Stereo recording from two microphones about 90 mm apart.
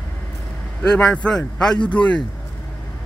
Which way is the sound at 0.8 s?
10° left (ahead or behind).